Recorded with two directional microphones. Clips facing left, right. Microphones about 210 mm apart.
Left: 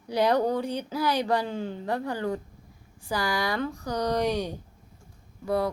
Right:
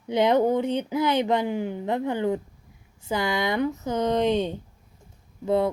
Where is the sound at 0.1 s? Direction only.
20° right (ahead or behind).